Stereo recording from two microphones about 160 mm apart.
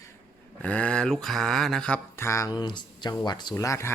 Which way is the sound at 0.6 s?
10° left (ahead or behind).